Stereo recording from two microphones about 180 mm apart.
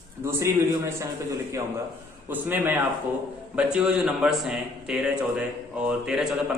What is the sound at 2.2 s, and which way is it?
A man's voice, 10° right (ahead or behind).